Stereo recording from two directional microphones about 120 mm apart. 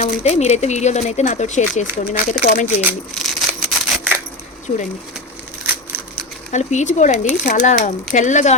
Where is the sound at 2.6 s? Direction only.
15° right (ahead or behind).